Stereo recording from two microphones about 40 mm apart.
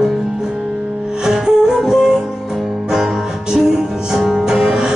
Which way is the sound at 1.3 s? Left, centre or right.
Centre.